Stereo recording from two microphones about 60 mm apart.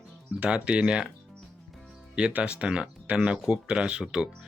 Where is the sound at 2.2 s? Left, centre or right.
Centre.